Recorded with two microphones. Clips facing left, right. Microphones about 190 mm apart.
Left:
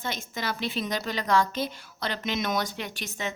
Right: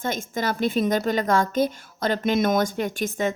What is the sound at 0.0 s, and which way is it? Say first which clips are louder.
A woman's voice: right 7 dB; 50° right (ahead or behind).